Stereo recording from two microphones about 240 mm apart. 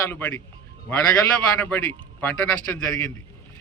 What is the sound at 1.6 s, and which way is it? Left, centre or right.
A man's voice, centre.